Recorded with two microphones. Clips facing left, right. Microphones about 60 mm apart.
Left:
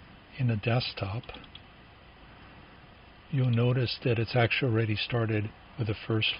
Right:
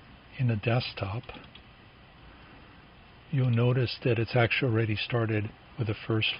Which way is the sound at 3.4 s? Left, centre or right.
Centre.